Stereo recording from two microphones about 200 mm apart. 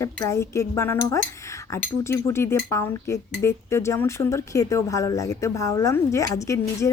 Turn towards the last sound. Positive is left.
turn(degrees=15)  # may be behind; listen again after turning